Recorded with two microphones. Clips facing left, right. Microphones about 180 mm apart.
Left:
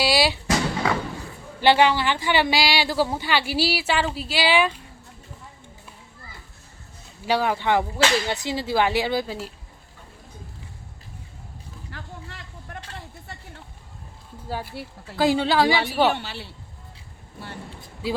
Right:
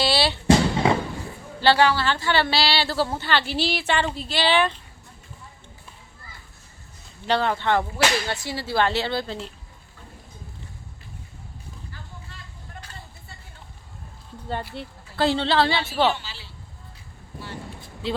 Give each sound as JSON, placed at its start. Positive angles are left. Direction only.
{"t": 0.0, "sound": "drum", "side_deg": 10}
{"t": 0.4, "sound": "music", "side_deg": -25}
{"t": 1.6, "sound": "a woman's voice", "side_deg": 15}
{"t": 7.3, "sound": "a woman's voice", "side_deg": 10}
{"t": 11.9, "sound": "a sound", "side_deg": 80}
{"t": 14.4, "sound": "a woman's voice", "side_deg": 5}
{"t": 16.1, "sound": "speech", "side_deg": 60}
{"t": 18.0, "sound": "a woman's voice", "side_deg": 10}